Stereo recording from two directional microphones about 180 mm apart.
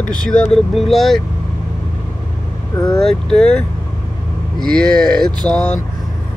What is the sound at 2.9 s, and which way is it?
Speech, 5° left (ahead or behind).